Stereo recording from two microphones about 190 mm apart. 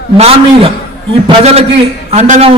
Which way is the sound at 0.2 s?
30° right (ahead or behind).